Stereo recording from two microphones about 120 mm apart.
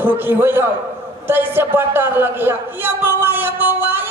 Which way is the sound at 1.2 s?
15° right (ahead or behind).